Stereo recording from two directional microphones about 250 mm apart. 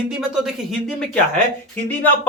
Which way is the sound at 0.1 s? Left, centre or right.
Centre.